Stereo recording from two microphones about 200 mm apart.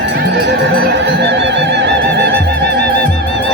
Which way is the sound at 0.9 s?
60° right (ahead or behind).